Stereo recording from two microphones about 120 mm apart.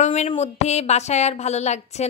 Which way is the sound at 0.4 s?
65° left (ahead or behind).